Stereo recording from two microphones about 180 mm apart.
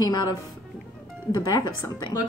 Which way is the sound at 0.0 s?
20° left (ahead or behind).